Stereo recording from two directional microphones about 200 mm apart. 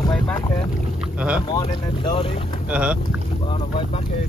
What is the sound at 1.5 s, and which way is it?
Speech, 20° left (ahead or behind).